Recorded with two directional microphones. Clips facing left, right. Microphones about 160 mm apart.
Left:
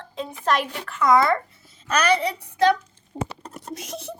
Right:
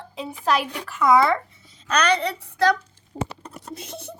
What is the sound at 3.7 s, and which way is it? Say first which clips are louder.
Beatboxing: left 2 dB; 90° left.